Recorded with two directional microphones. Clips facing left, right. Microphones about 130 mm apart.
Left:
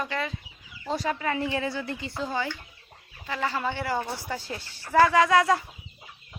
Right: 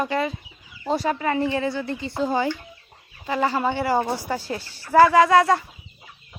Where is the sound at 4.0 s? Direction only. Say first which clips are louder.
Right 8 dB; 40° right (ahead or behind).